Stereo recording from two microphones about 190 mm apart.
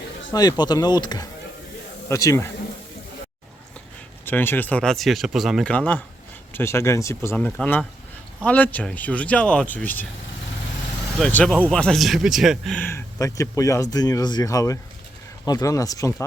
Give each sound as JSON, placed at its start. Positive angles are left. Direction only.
{"t": 0.3, "sound": "speech", "side_deg": 20}
{"t": 4.3, "sound": "speech", "side_deg": 10}
{"t": 11.2, "sound": "speech", "side_deg": 5}
{"t": 12.8, "sound": "speech", "side_deg": 10}